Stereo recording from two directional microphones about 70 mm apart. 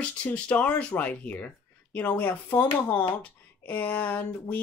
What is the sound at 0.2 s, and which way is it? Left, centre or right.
Speech, centre.